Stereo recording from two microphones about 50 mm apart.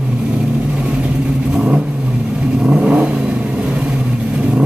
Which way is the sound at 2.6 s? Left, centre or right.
Right.